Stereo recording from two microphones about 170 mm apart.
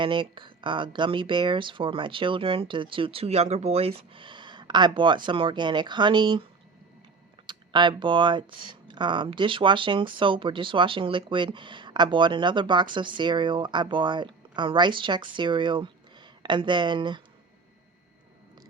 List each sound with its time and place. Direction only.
0.0 s speech: 30° right (ahead or behind)
7.4 s speech: 25° right (ahead or behind)